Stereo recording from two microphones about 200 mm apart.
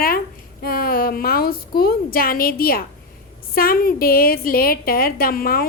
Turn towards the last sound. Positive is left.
turn(degrees=50)  # may be behind; listen again after turning